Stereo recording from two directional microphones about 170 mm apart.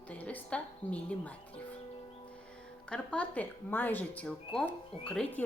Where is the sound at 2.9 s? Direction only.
5° left (ahead or behind).